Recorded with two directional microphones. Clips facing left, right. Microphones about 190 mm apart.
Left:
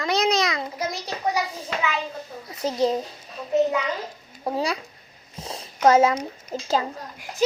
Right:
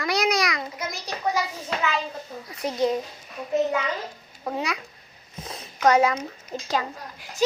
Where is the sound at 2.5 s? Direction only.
25° left (ahead or behind).